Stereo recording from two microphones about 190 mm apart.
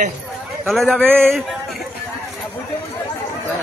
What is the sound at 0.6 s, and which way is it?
Speech, centre (ahead or behind).